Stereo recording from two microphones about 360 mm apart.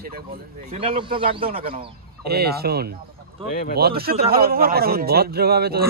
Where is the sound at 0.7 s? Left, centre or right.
Centre.